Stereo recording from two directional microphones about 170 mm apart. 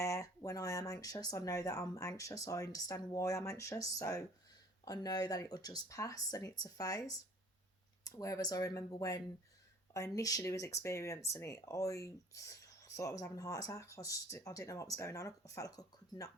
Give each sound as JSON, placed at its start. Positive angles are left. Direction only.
{"t": 0.0, "sound": "speech", "side_deg": 20}